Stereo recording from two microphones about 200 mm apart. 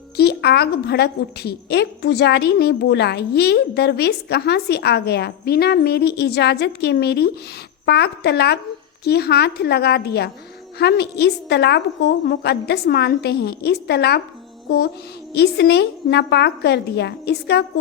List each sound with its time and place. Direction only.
0.2 s a woman's voice: 55° left (ahead or behind)
15.3 s a woman's voice: 55° left (ahead or behind)